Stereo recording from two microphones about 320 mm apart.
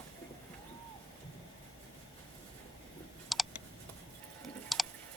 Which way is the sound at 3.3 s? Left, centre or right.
Centre.